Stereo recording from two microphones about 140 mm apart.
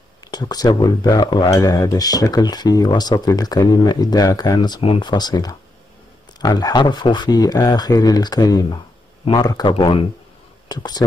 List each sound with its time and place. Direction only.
0.2 s speech: 30° left (ahead or behind)